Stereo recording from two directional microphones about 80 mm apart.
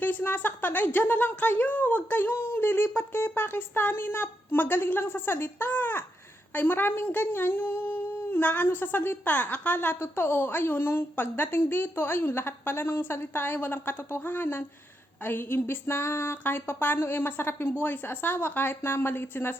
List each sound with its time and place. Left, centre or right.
0.0 s speech: left